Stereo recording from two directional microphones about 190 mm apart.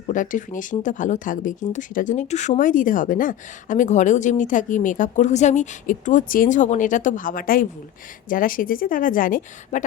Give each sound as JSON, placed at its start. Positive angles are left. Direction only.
{"t": 0.1, "sound": "speech", "side_deg": 45}